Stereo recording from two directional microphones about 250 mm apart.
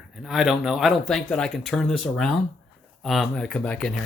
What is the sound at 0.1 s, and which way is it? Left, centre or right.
Speech, centre.